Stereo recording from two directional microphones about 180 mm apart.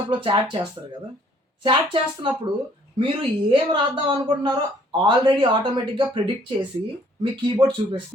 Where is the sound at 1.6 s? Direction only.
30° right (ahead or behind).